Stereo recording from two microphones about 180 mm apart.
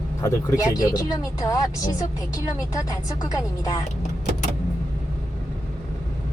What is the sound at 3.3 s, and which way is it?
Speech, 20° left (ahead or behind).